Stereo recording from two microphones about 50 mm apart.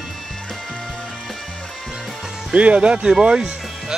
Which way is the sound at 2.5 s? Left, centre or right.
Right.